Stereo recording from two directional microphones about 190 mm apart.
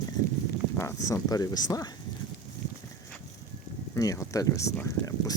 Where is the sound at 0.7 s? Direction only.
15° left (ahead or behind).